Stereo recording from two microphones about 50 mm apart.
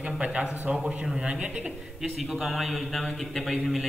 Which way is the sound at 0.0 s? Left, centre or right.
Centre.